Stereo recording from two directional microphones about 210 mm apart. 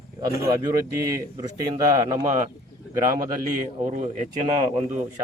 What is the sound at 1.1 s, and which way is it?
A man's voice, 15° right (ahead or behind).